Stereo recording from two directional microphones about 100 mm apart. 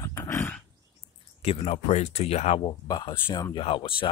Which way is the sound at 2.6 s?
45° left (ahead or behind).